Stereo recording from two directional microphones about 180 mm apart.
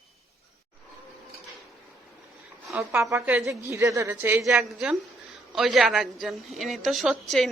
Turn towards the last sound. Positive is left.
turn(degrees=0)  # may be behind; listen again after turning